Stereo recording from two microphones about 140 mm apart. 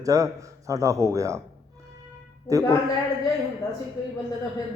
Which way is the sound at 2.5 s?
20° right (ahead or behind).